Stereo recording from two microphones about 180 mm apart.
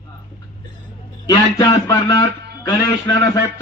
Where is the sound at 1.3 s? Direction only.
20° left (ahead or behind).